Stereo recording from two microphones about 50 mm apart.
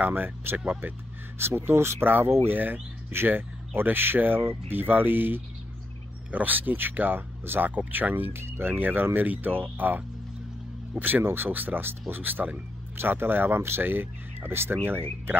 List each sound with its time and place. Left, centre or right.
0.1 s speech: right
2.0 s speech: right
8.7 s speech: right
11.2 s speech: right